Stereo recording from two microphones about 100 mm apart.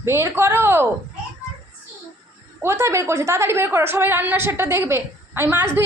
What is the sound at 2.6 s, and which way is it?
A woman's voice, 25° right (ahead or behind).